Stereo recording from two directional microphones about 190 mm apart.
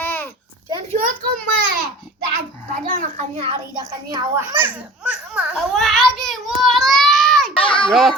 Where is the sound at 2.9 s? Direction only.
45° right (ahead or behind).